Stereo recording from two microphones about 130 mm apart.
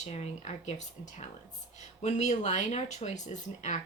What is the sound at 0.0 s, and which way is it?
Speech, 55° left (ahead or behind).